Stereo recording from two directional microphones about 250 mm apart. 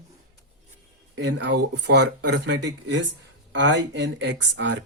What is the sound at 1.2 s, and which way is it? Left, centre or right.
Speech, right.